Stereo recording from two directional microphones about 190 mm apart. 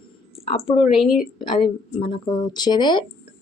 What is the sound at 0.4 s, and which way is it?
Speech, 30° left (ahead or behind).